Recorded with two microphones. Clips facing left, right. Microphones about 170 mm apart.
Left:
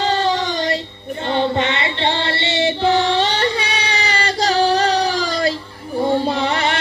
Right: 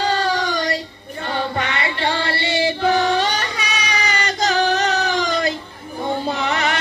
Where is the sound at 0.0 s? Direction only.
25° left (ahead or behind).